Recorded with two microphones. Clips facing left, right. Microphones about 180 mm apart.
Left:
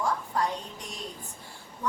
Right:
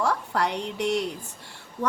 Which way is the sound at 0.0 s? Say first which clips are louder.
Right 3 dB; 75° right (ahead or behind).